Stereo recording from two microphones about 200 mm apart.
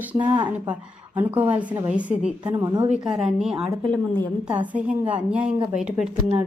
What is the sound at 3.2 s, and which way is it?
Speech, 5° right (ahead or behind).